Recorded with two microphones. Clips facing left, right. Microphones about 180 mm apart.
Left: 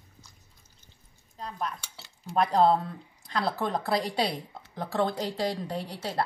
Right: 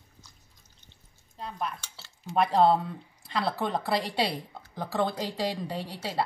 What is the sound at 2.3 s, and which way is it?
Speech, centre (ahead or behind).